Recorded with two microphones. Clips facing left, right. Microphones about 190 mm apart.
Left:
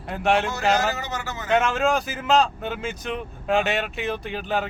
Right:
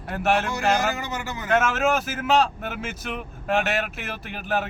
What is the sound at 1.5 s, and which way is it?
Speech, 5° right (ahead or behind).